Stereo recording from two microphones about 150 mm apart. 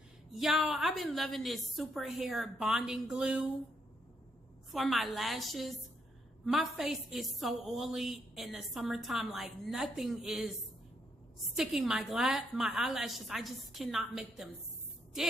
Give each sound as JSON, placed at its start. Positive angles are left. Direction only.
{"t": 0.3, "sound": "a woman's voice", "side_deg": 0}
{"t": 4.6, "sound": "a woman's voice", "side_deg": 0}
{"t": 11.5, "sound": "a woman's voice", "side_deg": 0}